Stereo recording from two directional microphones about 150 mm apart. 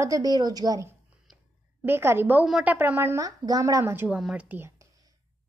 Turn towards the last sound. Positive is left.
turn(degrees=-10)  # may be behind; listen again after turning